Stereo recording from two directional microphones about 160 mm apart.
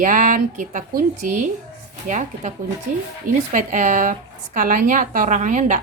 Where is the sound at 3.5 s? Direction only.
55° right (ahead or behind).